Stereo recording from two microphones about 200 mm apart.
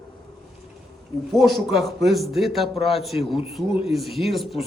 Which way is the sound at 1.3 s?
Centre (ahead or behind).